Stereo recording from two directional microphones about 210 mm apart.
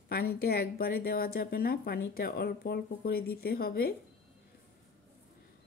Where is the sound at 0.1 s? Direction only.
45° left (ahead or behind).